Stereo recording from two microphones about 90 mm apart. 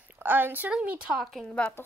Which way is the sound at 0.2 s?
20° right (ahead or behind).